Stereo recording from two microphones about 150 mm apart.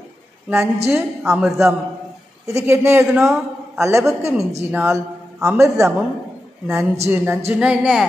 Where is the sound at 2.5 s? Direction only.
20° right (ahead or behind).